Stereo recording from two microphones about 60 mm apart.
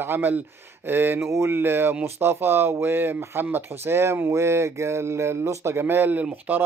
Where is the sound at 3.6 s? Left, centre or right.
Right.